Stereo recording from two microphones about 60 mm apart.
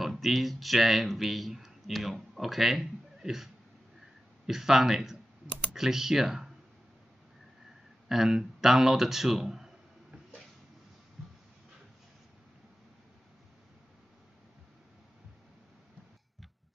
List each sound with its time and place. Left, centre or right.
0.0 s speech: centre
4.5 s speech: centre
8.1 s speech: centre